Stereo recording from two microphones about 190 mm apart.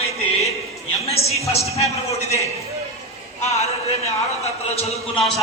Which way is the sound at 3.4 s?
35° left (ahead or behind).